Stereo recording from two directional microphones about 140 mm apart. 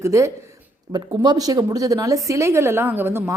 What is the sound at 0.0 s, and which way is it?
A woman's voice, 20° right (ahead or behind).